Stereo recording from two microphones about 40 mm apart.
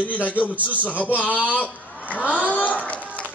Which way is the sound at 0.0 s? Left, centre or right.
Left.